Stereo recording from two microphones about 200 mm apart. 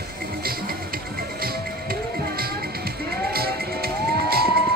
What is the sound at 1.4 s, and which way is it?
Music, 50° right (ahead or behind).